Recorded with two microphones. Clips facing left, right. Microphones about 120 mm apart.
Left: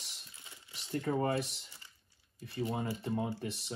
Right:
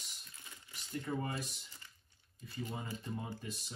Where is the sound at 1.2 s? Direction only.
70° left (ahead or behind).